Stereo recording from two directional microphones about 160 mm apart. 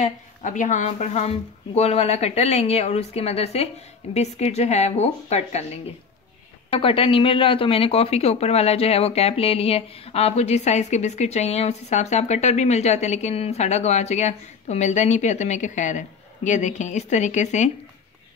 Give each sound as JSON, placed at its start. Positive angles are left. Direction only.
{"t": 0.0, "sound": "speech", "side_deg": 50}
{"t": 6.7, "sound": "speech", "side_deg": 35}